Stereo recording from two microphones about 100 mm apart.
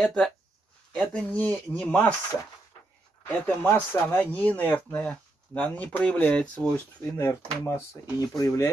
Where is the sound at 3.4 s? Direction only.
20° left (ahead or behind).